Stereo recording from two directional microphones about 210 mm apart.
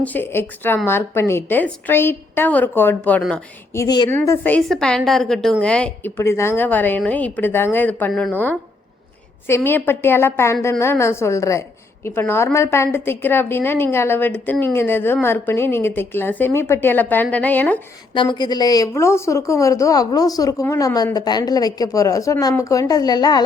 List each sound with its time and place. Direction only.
0.0 s a woman's voice: 10° left (ahead or behind)
3.8 s a woman's voice: 20° left (ahead or behind)
4.1 s a woman's voice: 10° left (ahead or behind)
18.1 s a woman's voice: 20° left (ahead or behind)